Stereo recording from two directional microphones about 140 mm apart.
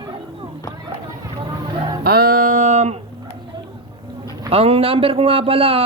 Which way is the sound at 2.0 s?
90° right.